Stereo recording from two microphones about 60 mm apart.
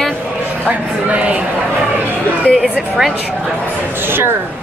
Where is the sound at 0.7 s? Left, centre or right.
Right.